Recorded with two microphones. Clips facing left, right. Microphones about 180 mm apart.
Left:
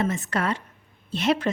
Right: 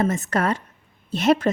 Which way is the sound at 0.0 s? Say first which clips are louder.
Right 4 dB; 45° right (ahead or behind).